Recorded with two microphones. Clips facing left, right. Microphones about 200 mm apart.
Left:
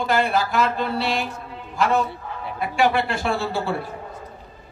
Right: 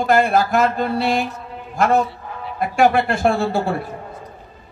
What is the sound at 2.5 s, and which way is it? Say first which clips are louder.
A man's voice: right 5 dB; 50° right (ahead or behind).